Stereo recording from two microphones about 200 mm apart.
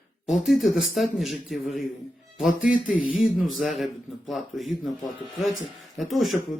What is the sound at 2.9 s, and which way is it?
Speech, 80° left.